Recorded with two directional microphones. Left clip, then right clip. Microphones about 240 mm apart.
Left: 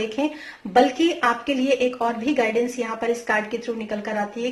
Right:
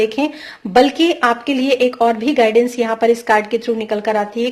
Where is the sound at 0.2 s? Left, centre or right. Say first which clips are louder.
Right 5 dB; right.